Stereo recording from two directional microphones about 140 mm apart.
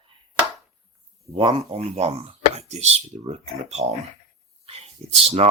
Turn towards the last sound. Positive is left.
turn(degrees=-50)  # may be behind; listen again after turning